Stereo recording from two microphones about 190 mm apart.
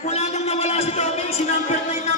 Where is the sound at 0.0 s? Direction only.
35° left (ahead or behind).